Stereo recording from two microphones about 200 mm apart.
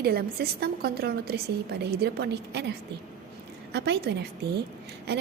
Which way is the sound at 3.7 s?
55° right (ahead or behind).